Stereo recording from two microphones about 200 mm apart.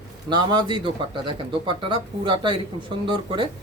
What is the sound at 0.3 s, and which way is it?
Speech, 20° right (ahead or behind).